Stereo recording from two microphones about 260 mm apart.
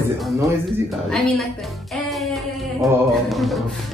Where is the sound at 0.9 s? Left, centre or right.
Centre.